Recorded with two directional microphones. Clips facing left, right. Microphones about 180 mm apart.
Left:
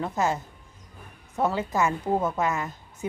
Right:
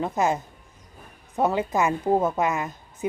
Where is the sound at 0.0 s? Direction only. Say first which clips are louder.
Right 3 dB; 20° right (ahead or behind).